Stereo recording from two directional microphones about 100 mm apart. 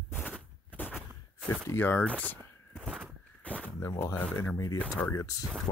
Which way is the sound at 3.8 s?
30° left (ahead or behind).